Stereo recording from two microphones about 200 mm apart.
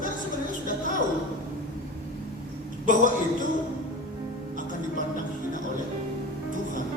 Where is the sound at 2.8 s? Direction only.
40° right (ahead or behind).